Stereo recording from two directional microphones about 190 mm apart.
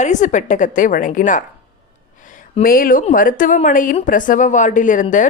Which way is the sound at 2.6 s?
50° left (ahead or behind).